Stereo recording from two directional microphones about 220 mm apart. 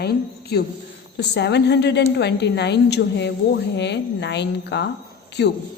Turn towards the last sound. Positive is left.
turn(degrees=50)  # may be behind; listen again after turning